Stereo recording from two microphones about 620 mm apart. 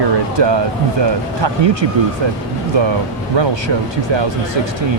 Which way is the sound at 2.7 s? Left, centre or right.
Right.